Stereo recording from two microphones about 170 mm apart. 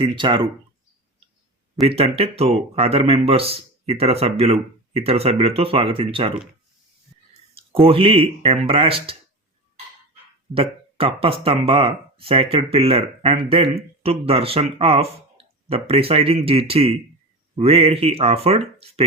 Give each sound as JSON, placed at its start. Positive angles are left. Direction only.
{"t": 0.0, "sound": "speech", "side_deg": -30}
{"t": 1.7, "sound": "speech", "side_deg": -35}
{"t": 7.5, "sound": "speech", "side_deg": -35}
{"t": 10.5, "sound": "speech", "side_deg": -35}